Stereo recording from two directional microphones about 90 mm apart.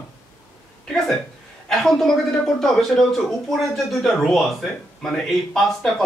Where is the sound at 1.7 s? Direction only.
5° left (ahead or behind).